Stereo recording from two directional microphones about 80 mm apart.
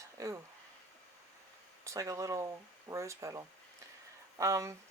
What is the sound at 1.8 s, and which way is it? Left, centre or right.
Speech, right.